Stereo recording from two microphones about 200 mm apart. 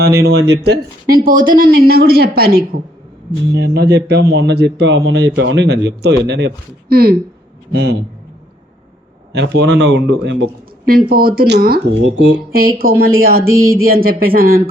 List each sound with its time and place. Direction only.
0.0 s speech: 55° right (ahead or behind)
9.3 s speech: 60° right (ahead or behind)
13.4 s a sound: 90° right
13.8 s speech: 50° right (ahead or behind)